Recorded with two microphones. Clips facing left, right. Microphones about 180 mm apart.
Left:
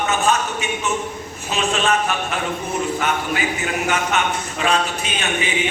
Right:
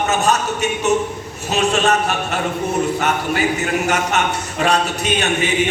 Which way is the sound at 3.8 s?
40° right (ahead or behind).